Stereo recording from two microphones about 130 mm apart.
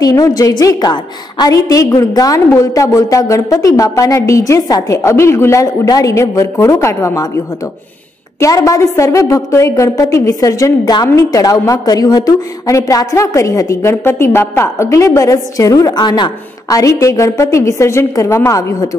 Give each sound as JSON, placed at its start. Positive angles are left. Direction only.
{"t": 0.0, "sound": "a woman's voice", "side_deg": 25}
{"t": 8.4, "sound": "a woman's voice", "side_deg": 25}